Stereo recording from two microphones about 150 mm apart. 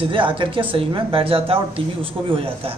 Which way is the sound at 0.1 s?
35° right (ahead or behind).